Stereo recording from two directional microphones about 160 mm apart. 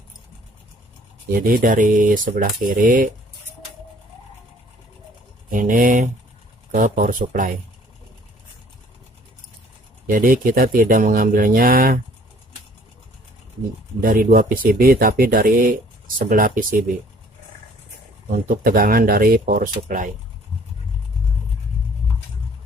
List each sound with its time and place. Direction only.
1.3 s speech: 65° right (ahead or behind)
5.5 s speech: 60° right (ahead or behind)
10.1 s speech: 60° right (ahead or behind)
14.0 s speech: 65° right (ahead or behind)
18.3 s speech: 65° right (ahead or behind)